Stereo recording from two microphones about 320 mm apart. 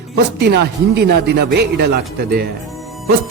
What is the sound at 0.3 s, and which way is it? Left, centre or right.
Speech, right.